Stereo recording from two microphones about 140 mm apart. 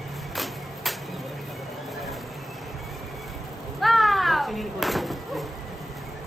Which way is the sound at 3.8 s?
Centre (ahead or behind).